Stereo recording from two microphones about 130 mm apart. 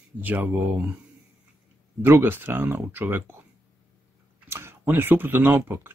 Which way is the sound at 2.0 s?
15° right (ahead or behind).